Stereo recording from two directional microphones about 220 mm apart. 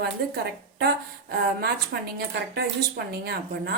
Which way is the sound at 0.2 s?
50° right (ahead or behind).